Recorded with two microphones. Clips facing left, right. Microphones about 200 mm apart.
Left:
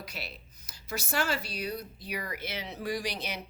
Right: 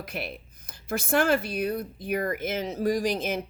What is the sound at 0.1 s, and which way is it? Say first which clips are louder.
Speech: right 8 dB; 55° right (ahead or behind).